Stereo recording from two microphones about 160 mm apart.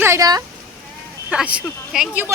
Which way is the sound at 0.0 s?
20° right (ahead or behind).